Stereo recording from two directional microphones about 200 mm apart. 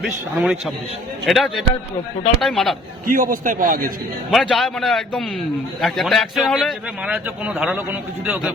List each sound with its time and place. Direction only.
0.0 s a man's voice: centre (ahead or behind)
3.1 s a man's voice: 45° right (ahead or behind)
4.3 s a man's voice: centre (ahead or behind)